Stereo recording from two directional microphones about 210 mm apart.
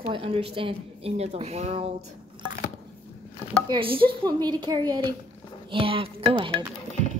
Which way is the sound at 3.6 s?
25° right (ahead or behind).